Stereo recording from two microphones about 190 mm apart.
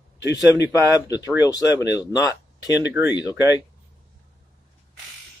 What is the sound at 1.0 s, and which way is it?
Speech, 20° left (ahead or behind).